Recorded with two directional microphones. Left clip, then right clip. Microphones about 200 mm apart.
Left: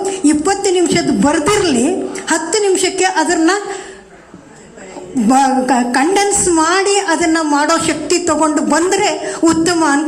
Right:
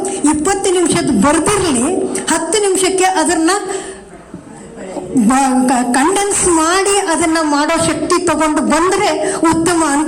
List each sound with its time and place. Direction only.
0.0 s a woman's voice: 50° right (ahead or behind)
5.2 s a woman's voice: 50° right (ahead or behind)